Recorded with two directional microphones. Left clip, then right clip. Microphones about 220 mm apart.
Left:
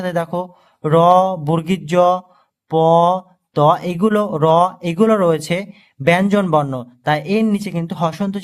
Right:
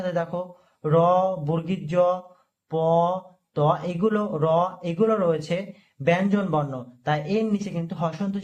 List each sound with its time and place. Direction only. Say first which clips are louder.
0.0 s speech: left 6 dB; 40° left (ahead or behind)